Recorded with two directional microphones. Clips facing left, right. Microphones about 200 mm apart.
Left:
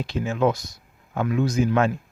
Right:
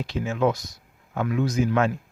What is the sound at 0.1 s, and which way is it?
Speech, 30° left (ahead or behind).